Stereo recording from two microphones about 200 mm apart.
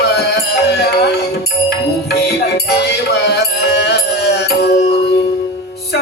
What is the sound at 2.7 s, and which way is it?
Music, 55° left (ahead or behind).